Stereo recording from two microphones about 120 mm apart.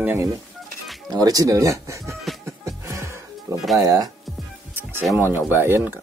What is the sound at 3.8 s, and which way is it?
Speech, 30° right (ahead or behind).